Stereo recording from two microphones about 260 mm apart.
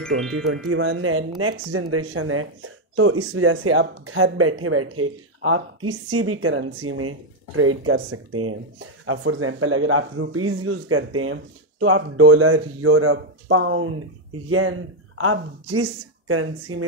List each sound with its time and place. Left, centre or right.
0.1 s speech: right